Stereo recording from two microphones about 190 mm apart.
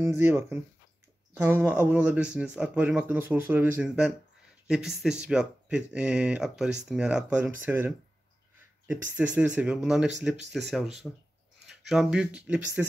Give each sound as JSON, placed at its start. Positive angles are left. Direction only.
{"t": 0.0, "sound": "speech", "side_deg": -10}